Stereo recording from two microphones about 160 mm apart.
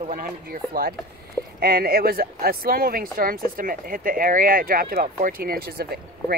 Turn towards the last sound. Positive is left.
turn(degrees=-70)  # may be behind; listen again after turning